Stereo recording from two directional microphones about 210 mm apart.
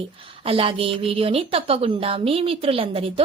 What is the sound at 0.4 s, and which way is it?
A woman's voice, 25° right (ahead or behind).